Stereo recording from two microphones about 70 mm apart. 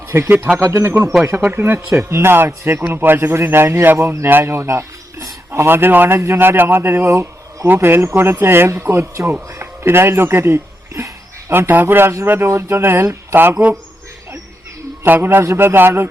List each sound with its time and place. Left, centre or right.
0.3 s speech: right
0.6 s speech: right
9.5 s a sound: right
11.7 s speech: right
15.0 s speech: right